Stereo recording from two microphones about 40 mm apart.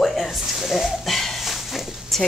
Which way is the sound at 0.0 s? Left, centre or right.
Centre.